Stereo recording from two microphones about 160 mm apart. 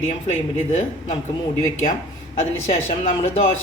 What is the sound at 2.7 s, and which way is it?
Speech, 45° left (ahead or behind).